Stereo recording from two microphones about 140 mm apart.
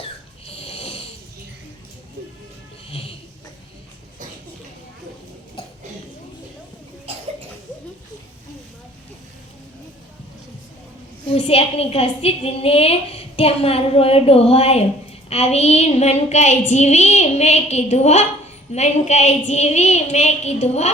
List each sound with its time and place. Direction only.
0.4 s snoring: 45° left (ahead or behind)
5.6 s a sound: 35° left (ahead or behind)
7.1 s cough: 45° right (ahead or behind)
11.3 s a woman's voice: 45° left (ahead or behind)